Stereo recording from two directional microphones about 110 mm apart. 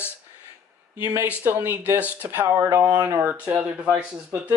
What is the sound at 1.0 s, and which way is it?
Speech, 25° right (ahead or behind).